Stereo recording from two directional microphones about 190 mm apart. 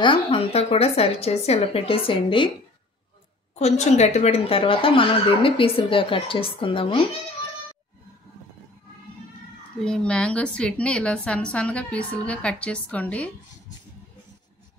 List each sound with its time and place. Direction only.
0.0 s a woman's voice: 30° left (ahead or behind)
3.5 s speech: 35° left (ahead or behind)
9.8 s a woman's voice: 5° left (ahead or behind)